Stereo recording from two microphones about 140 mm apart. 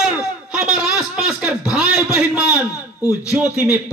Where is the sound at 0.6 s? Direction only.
5° right (ahead or behind).